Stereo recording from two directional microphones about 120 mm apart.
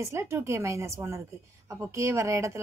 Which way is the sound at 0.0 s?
20° right (ahead or behind).